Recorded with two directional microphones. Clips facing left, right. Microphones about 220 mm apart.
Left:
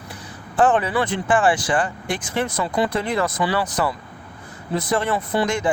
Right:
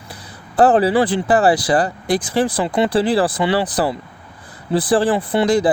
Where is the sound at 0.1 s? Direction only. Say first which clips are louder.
Right 1 dB; 35° right (ahead or behind).